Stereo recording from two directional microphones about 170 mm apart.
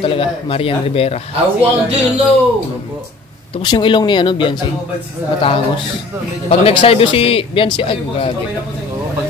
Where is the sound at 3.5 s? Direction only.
30° left (ahead or behind).